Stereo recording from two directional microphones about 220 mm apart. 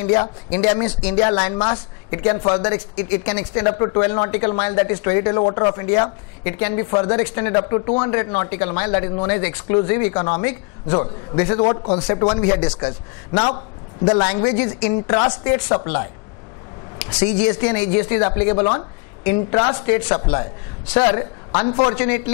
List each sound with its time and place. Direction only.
0.1 s speech: 15° left (ahead or behind)
5.8 s speech: 20° left (ahead or behind)
17.5 s speech: 15° left (ahead or behind)